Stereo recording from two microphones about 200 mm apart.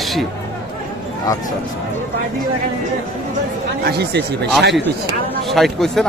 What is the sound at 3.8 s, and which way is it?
Speech, 55° right (ahead or behind).